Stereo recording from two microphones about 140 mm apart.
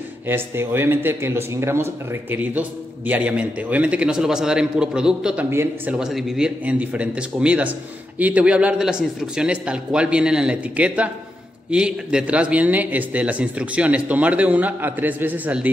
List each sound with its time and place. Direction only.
0.3 s a man's voice: 15° right (ahead or behind)